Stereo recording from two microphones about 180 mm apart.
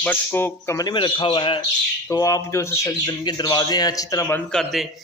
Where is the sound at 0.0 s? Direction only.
10° left (ahead or behind).